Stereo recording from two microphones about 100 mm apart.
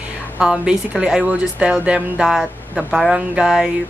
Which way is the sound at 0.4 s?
5° right (ahead or behind).